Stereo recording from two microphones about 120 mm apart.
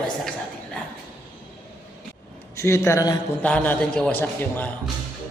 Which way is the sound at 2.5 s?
25° left (ahead or behind).